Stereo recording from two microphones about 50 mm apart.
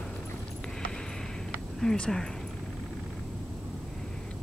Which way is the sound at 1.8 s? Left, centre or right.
Centre.